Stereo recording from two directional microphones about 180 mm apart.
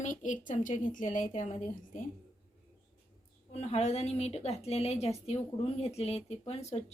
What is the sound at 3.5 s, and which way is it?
A woman's voice, 35° left (ahead or behind).